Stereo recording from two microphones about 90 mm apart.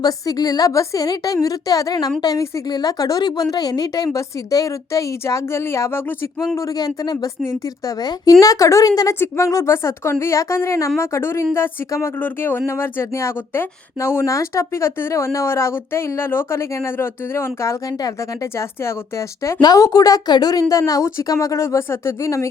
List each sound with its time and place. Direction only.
0.0 s a woman's voice: 45° left (ahead or behind)
6.7 s a woman's voice: 45° left (ahead or behind); by 17.7 s 30° left (ahead or behind)
19.6 s speech: 45° left (ahead or behind)